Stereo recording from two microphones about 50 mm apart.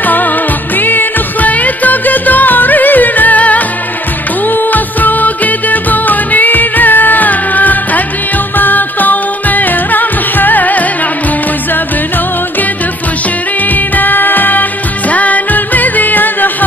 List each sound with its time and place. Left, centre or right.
0.0 s music: left
13.7 s music: left